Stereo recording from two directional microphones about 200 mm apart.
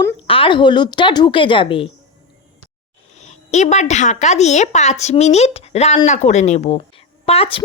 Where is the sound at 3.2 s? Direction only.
35° left (ahead or behind).